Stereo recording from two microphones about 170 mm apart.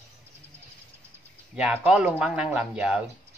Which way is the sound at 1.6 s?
5° right (ahead or behind).